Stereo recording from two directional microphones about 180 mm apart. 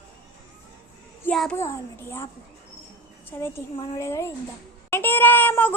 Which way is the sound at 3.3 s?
15° left (ahead or behind).